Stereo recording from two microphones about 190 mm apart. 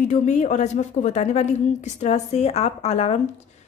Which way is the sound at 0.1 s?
40° left (ahead or behind).